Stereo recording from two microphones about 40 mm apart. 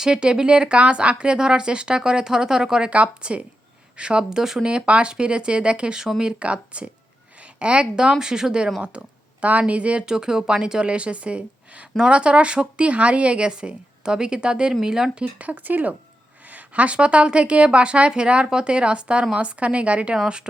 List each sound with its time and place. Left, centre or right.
0.0 s speech: centre
2.8 s speech: right; by 4.6 s centre
4.6 s speech: right
6.4 s a woman's voice: right
8.8 s speech: right
10.1 s speech: centre
14.7 s speech: centre
15.1 s a woman's voice: right
20.2 s speech: right